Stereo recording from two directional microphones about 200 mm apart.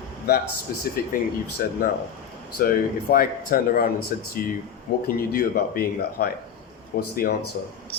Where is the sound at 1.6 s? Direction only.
50° left (ahead or behind).